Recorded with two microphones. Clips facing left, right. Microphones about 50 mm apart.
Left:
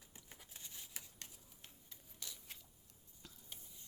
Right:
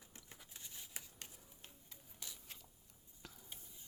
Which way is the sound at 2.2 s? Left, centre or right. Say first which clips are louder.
Left 1 dB; centre.